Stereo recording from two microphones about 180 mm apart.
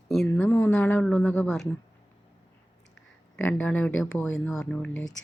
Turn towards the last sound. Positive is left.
turn(degrees=5)  # may be behind; listen again after turning